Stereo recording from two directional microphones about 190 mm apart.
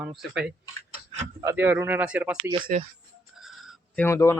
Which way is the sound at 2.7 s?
40° right (ahead or behind).